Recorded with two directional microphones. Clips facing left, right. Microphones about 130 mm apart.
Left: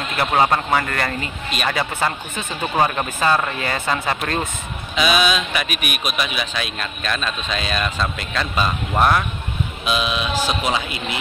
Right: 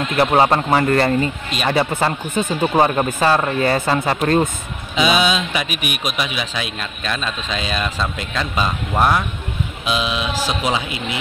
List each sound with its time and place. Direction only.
0.1 s a man's voice: 30° right (ahead or behind); by 9.2 s 15° right (ahead or behind)
9.8 s speech: 25° right (ahead or behind)